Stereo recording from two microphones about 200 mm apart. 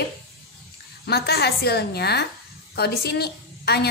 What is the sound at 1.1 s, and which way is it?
A woman's voice, 50° left (ahead or behind).